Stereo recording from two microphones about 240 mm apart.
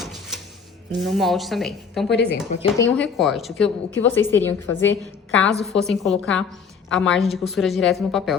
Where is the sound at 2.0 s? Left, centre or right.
Left.